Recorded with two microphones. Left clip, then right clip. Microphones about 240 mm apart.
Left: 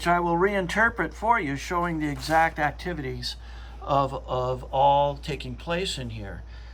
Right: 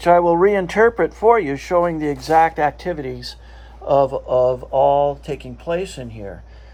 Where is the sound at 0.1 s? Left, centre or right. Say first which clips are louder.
Right 10 dB; left.